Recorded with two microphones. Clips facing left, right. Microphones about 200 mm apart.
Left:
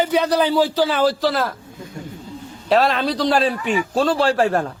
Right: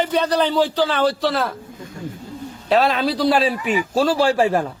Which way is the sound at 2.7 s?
Centre (ahead or behind).